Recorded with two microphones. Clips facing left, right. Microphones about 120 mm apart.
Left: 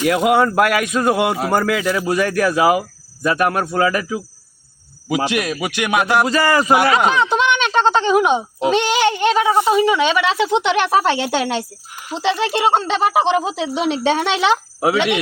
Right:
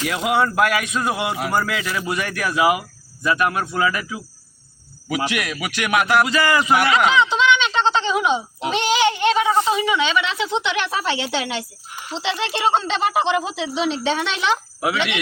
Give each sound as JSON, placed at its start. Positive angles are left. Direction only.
{"t": 0.0, "sound": "speech", "side_deg": 50}
{"t": 5.0, "sound": "a man's voice", "side_deg": 25}
{"t": 6.2, "sound": "speech", "side_deg": 40}
{"t": 9.0, "sound": "speech", "side_deg": 45}